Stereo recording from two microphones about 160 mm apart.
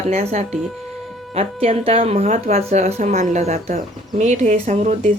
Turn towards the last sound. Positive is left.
turn(degrees=-45)  # may be behind; listen again after turning